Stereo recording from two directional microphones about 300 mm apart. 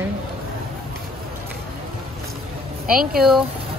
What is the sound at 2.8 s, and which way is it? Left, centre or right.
Speech, right.